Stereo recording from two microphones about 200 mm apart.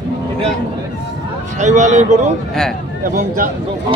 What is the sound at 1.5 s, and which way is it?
Speech, 35° right (ahead or behind).